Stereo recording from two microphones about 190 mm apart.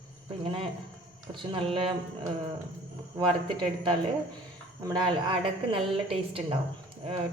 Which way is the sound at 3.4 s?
25° right (ahead or behind).